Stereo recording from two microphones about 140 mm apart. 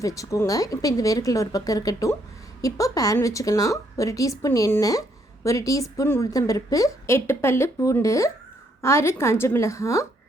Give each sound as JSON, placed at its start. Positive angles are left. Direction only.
{"t": 0.0, "sound": "a woman's voice", "side_deg": 25}